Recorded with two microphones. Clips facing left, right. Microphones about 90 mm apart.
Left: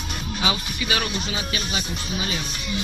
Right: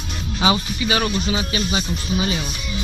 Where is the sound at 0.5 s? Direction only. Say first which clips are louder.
Right 7 dB; 15° right (ahead or behind).